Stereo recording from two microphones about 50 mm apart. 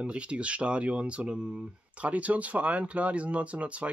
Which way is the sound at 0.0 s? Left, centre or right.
Right.